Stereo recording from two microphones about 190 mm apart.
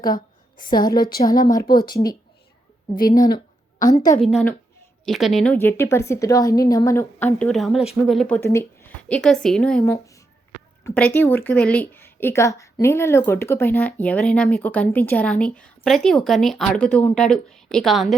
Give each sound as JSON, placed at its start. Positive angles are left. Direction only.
{"t": 0.8, "sound": "a woman's voice", "side_deg": 50}
{"t": 1.7, "sound": "speech", "side_deg": 25}
{"t": 2.9, "sound": "a woman's voice", "side_deg": 45}
{"t": 4.2, "sound": "a woman's voice", "side_deg": 0}
{"t": 7.3, "sound": "speech", "side_deg": 5}
{"t": 8.4, "sound": "a woman's voice", "side_deg": 15}
{"t": 10.8, "sound": "a woman's voice", "side_deg": 10}